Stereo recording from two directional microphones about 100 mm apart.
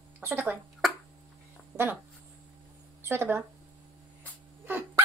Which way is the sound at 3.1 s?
25° right (ahead or behind).